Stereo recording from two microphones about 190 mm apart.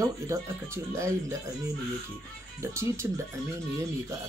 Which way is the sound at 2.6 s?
15° right (ahead or behind).